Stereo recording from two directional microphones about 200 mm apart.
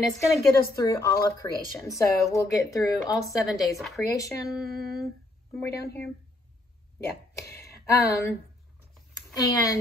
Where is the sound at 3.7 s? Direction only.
Centre (ahead or behind).